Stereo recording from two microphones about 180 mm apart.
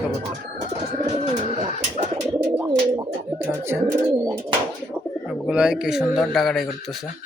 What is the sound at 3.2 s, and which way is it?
Bird, 15° right (ahead or behind).